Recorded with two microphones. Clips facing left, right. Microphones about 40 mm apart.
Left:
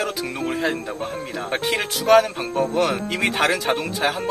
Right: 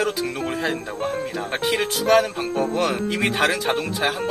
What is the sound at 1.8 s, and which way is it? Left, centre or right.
Speech, centre.